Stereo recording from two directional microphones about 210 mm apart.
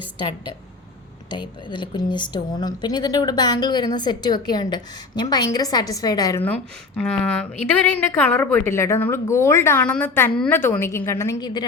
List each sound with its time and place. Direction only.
1.3 s a woman's voice: 20° left (ahead or behind)